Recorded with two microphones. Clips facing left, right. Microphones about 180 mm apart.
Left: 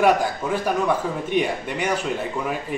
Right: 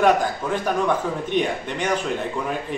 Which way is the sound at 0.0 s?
10° left (ahead or behind).